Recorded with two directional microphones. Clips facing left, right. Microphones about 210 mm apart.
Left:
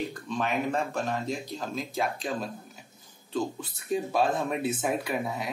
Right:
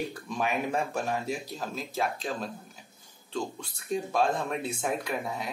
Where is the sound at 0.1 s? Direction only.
10° right (ahead or behind).